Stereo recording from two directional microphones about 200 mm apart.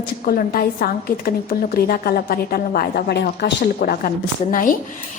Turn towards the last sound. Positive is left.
turn(degrees=40)  # may be behind; listen again after turning